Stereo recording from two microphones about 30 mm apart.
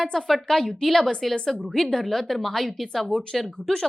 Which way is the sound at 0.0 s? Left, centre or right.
Centre.